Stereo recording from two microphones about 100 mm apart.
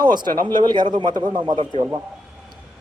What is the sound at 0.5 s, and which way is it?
A man's voice, 45° right (ahead or behind).